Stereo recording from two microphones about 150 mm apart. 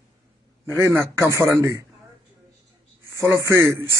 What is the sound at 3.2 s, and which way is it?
Speech, 20° right (ahead or behind).